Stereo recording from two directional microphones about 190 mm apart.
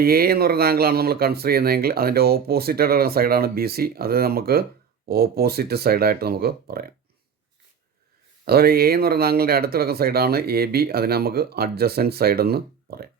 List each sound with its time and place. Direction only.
0.0 s speech: 55° right (ahead or behind)
8.4 s speech: 55° right (ahead or behind)